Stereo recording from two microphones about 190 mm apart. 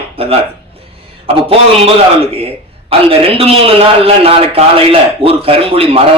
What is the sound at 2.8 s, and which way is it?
Speech, 30° right (ahead or behind).